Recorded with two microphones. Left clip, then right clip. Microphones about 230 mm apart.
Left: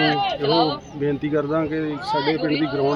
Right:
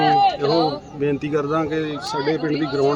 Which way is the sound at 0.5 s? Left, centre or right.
Left.